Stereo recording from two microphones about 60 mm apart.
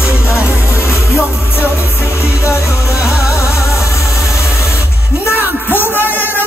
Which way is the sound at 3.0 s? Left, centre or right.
Left.